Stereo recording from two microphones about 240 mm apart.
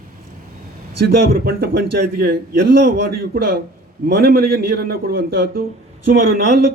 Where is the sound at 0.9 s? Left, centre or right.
Right.